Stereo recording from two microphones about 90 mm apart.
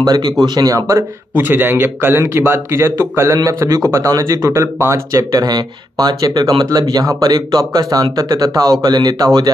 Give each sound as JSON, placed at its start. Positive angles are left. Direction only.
{"t": 0.0, "sound": "speech", "side_deg": -50}
{"t": 1.3, "sound": "a man's voice", "side_deg": -25}